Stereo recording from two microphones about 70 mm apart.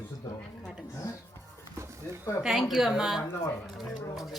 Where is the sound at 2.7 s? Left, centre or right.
Centre.